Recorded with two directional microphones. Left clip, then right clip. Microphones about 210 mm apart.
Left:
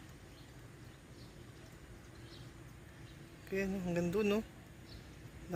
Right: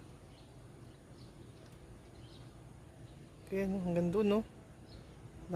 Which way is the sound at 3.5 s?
15° right (ahead or behind).